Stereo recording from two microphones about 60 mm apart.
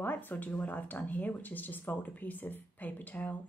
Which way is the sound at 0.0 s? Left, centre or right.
Left.